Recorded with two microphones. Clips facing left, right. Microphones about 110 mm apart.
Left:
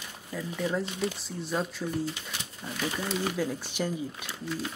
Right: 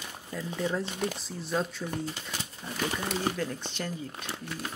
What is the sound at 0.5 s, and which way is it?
Speech, centre (ahead or behind).